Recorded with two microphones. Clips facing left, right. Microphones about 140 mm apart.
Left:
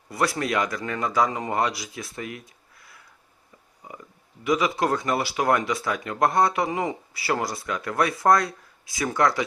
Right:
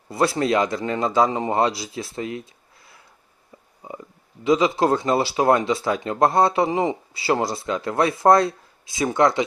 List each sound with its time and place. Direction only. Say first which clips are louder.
0.1 s speech: right 5 dB; 25° right (ahead or behind)
3.8 s a sound: right 6 dB; 25° right (ahead or behind)
4.4 s speech: right 5 dB; 25° right (ahead or behind)